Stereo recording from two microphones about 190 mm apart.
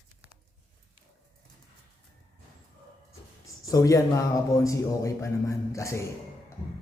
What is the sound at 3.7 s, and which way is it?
A man's voice, 15° left (ahead or behind).